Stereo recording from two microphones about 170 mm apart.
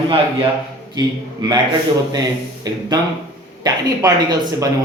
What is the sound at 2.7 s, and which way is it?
Speech, 25° right (ahead or behind).